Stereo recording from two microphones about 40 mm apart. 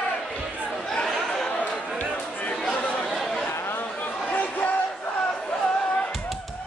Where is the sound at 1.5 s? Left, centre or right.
Left.